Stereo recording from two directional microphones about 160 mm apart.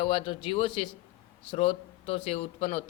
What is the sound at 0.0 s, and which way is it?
A man's voice, 35° left (ahead or behind).